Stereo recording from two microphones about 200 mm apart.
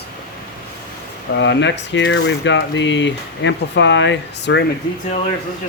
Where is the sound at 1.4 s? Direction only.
65° left (ahead or behind).